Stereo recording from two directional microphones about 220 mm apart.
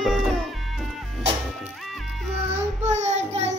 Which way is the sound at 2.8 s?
30° right (ahead or behind).